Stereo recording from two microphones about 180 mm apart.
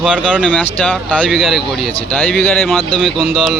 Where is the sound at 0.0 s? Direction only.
5° left (ahead or behind).